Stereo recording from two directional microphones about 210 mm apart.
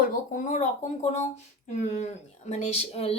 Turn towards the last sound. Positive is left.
turn(degrees=30)  # may be behind; listen again after turning